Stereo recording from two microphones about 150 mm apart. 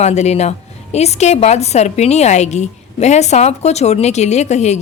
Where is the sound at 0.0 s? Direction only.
50° left (ahead or behind).